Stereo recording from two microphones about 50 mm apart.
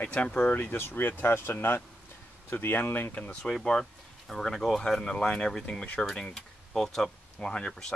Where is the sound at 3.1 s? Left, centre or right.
Left.